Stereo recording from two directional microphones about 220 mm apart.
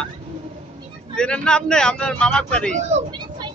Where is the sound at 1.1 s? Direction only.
5° left (ahead or behind).